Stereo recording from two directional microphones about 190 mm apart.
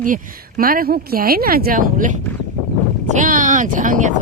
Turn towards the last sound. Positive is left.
turn(degrees=-40)  # may be behind; listen again after turning